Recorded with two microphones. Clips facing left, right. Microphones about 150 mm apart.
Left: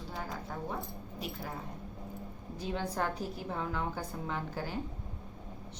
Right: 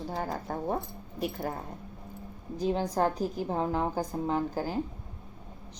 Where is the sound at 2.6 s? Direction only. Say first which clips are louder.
Right 7 dB; 35° right (ahead or behind).